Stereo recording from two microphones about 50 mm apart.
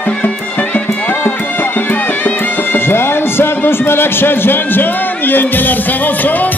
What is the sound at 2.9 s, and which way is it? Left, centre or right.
A man's voice, left.